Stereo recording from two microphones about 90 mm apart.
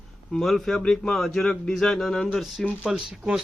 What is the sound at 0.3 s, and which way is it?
A man's voice, 5° left (ahead or behind).